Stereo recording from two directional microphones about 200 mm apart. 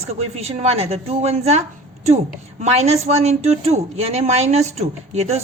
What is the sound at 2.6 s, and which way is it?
A woman's voice, 35° right (ahead or behind).